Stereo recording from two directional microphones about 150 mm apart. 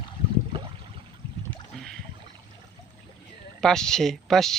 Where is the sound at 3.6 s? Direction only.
5° left (ahead or behind).